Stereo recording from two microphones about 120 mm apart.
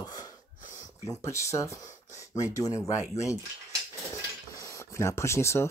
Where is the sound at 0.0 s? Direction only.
35° left (ahead or behind).